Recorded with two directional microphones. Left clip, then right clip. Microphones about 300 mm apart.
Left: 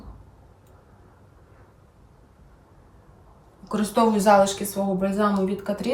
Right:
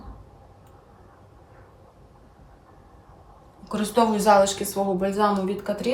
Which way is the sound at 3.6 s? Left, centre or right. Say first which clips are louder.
Even; centre.